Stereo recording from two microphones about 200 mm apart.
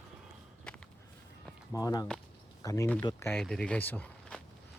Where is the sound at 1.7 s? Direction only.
20° left (ahead or behind).